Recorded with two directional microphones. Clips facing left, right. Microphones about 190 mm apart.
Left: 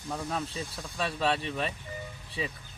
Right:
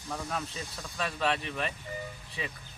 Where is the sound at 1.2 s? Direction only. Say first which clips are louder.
Left 2 dB; 30° left (ahead or behind).